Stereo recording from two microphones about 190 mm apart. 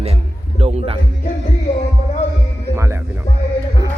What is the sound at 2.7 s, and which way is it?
Speech, 15° right (ahead or behind).